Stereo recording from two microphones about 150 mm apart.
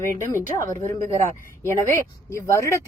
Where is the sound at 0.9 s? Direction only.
15° left (ahead or behind).